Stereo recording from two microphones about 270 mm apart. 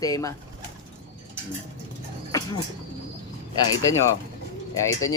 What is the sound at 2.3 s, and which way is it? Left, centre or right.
Bird, centre.